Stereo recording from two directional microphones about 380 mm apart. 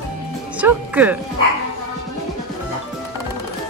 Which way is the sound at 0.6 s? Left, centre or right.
Centre.